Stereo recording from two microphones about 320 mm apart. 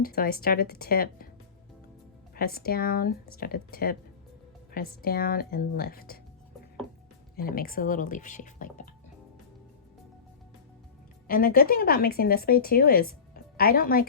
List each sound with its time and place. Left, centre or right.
0.0 s speech: left
2.3 s speech: left
7.3 s speech: left
11.3 s speech: left